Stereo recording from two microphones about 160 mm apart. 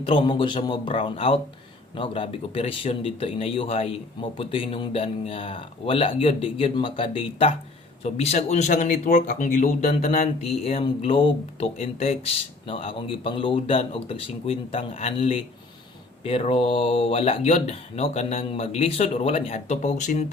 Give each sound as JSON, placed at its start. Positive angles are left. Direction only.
{"t": 0.0, "sound": "speech", "side_deg": 35}